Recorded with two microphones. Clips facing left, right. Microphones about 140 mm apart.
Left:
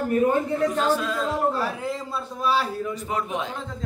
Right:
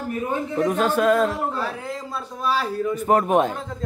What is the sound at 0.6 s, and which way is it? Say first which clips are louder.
Speech: right 2 dB; 55° right (ahead or behind).